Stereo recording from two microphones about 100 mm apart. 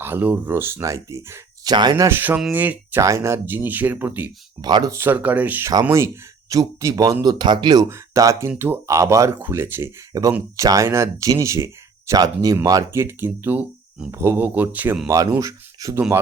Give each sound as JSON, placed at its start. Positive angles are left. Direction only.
{"t": 0.0, "sound": "speech", "side_deg": -20}
{"t": 1.7, "sound": "speech", "side_deg": -45}
{"t": 2.0, "sound": "speech", "side_deg": -20}
{"t": 3.0, "sound": "speech", "side_deg": -30}
{"t": 4.6, "sound": "speech", "side_deg": -45}
{"t": 4.9, "sound": "speech", "side_deg": -25}
{"t": 6.5, "sound": "speech", "side_deg": -35}
{"t": 7.9, "sound": "speech", "side_deg": -30}
{"t": 8.9, "sound": "speech", "side_deg": -30}
{"t": 10.1, "sound": "speech", "side_deg": -35}
{"t": 12.9, "sound": "speech", "side_deg": -25}
{"t": 15.0, "sound": "speech", "side_deg": -30}